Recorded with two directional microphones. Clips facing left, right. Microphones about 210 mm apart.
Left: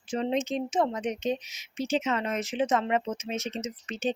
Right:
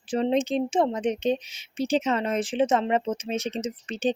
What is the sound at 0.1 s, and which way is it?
Speech, 35° right (ahead or behind).